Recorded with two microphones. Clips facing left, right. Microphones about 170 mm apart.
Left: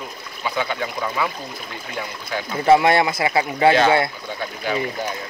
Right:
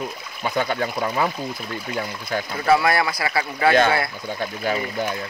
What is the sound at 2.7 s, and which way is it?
A man's voice, 25° left (ahead or behind).